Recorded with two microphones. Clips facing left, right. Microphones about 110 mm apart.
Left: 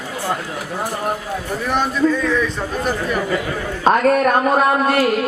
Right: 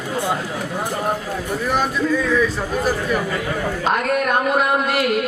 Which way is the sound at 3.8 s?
40° left (ahead or behind).